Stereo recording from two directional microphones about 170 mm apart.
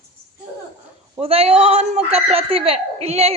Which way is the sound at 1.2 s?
35° right (ahead or behind).